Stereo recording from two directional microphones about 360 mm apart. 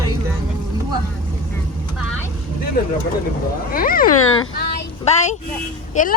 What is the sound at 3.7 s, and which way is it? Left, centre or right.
Speech, left.